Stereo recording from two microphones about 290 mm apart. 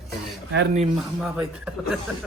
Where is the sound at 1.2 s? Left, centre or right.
Centre.